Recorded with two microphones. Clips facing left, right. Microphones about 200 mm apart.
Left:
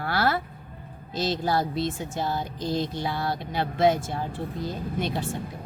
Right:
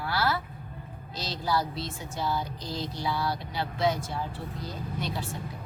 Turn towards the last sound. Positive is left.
turn(degrees=50)  # may be behind; listen again after turning